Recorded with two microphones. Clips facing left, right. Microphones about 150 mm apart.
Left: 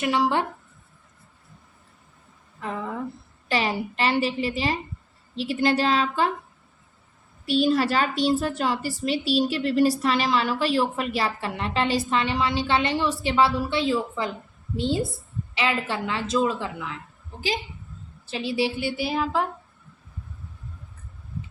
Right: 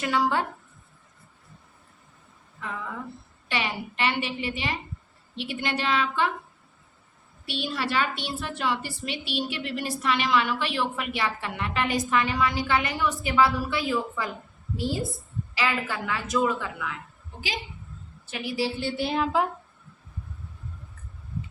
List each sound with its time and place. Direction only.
0.0 s a woman's voice: 20° left (ahead or behind)
2.6 s a woman's voice: 35° left (ahead or behind)
7.4 s a woman's voice: 40° left (ahead or behind)
18.3 s a woman's voice: 30° left (ahead or behind)
18.8 s a sound: 10° left (ahead or behind)